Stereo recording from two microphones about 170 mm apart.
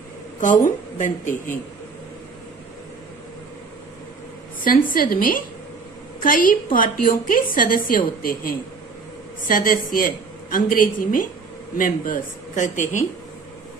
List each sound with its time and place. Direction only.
0.4 s a woman's voice: 50° left (ahead or behind)
4.6 s a woman's voice: 55° left (ahead or behind)